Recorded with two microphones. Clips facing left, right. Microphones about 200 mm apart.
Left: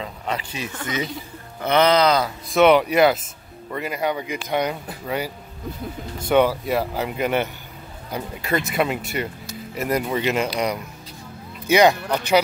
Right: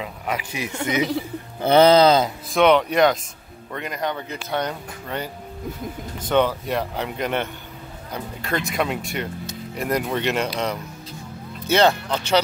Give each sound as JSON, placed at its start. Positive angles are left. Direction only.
{"t": 0.0, "sound": "a man's voice", "side_deg": -10}
{"t": 1.6, "sound": "speech", "side_deg": -30}
{"t": 2.5, "sound": "speech", "side_deg": 5}